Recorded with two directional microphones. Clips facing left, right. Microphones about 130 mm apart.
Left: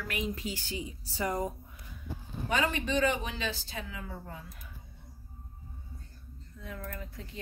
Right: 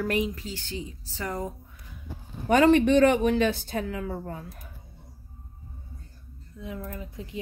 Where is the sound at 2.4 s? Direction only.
55° right (ahead or behind).